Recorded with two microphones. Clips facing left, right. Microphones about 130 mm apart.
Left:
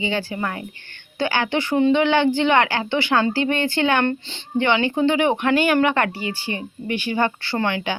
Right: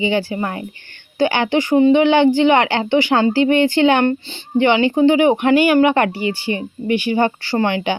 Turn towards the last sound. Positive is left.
turn(degrees=-20)  # may be behind; listen again after turning